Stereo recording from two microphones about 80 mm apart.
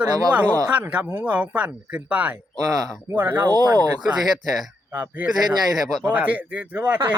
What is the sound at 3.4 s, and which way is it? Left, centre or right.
Speech, right.